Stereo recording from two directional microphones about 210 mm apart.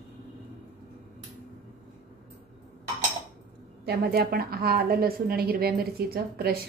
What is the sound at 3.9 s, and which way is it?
A woman's voice, 50° right (ahead or behind).